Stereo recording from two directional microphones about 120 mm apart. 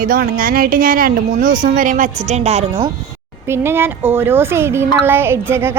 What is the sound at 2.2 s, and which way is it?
Speech, 65° right (ahead or behind).